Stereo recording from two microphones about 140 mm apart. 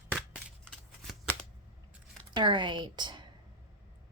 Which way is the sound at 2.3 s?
35° right (ahead or behind).